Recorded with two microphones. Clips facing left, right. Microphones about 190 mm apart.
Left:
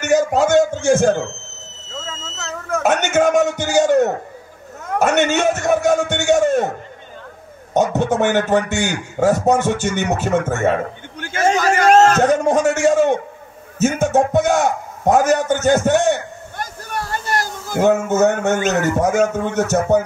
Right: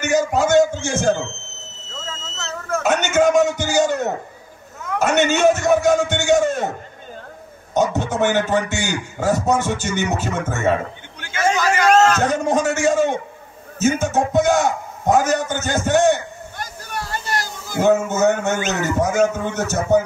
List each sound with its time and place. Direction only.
0.5 s a man's voice: 60° left (ahead or behind)
2.0 s a sound: centre (ahead or behind)
2.8 s a man's voice: 55° left (ahead or behind)
7.7 s a man's voice: 60° left (ahead or behind)
16.5 s a sound: 50° left (ahead or behind)
18.6 s a man's voice: 55° left (ahead or behind)